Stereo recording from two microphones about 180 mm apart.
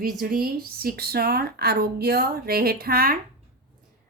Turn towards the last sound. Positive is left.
turn(degrees=-55)  # may be behind; listen again after turning